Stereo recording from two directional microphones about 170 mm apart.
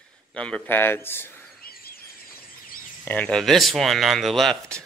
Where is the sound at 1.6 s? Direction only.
65° left (ahead or behind).